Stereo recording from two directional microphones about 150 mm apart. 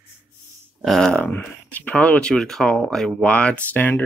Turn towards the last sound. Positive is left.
turn(degrees=10)  # may be behind; listen again after turning